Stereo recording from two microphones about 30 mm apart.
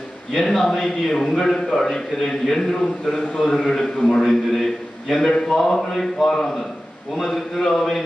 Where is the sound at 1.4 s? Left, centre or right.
Left.